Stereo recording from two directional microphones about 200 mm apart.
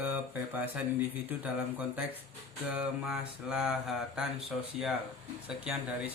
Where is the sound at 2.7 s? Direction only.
5° right (ahead or behind).